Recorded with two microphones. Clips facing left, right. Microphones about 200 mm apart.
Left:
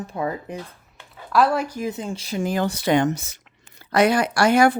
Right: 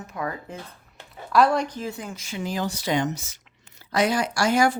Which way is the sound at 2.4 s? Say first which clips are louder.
Left 5 dB; 55° left (ahead or behind).